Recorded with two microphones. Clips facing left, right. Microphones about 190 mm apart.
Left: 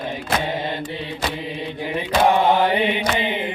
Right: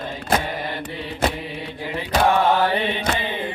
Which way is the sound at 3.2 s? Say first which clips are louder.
Left 3 dB; 20° left (ahead or behind).